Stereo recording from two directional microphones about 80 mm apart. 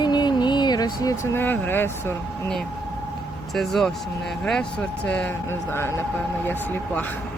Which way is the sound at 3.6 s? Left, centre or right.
Centre.